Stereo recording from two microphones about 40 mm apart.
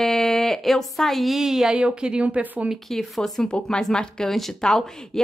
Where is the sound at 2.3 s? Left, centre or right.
Right.